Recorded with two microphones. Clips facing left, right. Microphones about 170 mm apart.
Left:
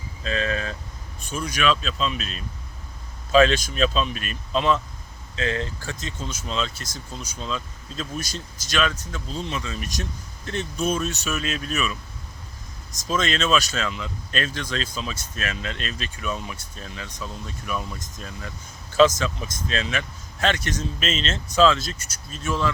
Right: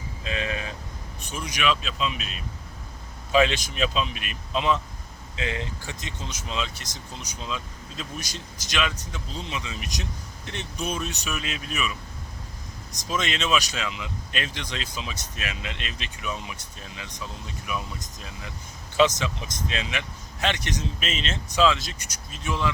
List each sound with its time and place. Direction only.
0.3 s vehicle: 15° right (ahead or behind)
1.3 s speech: 20° right (ahead or behind)
10.5 s speech: 40° left (ahead or behind)
10.9 s speech: 15° right (ahead or behind)
11.3 s speech: 40° left (ahead or behind)
13.1 s speech: 15° right (ahead or behind)
15.6 s speech: 40° left (ahead or behind)
15.9 s speech: 15° right (ahead or behind)
18.9 s speech: 15° right (ahead or behind)